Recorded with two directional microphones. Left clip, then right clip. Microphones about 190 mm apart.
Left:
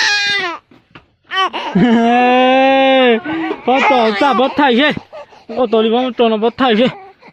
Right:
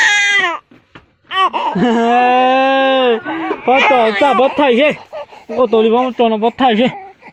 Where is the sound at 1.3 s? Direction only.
20° left (ahead or behind).